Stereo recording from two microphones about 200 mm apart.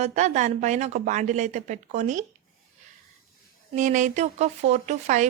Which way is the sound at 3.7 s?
40° right (ahead or behind).